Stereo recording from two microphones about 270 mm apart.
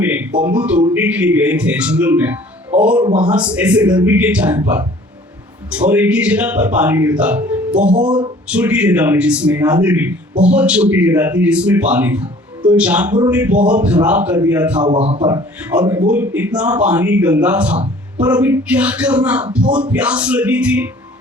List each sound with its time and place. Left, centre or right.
0.0 s a man's voice: centre
14.8 s a man's voice: right
15.7 s a man's voice: centre